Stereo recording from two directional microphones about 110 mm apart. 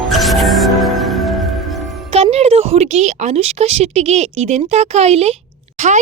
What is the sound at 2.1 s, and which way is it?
A woman's voice, 70° right (ahead or behind).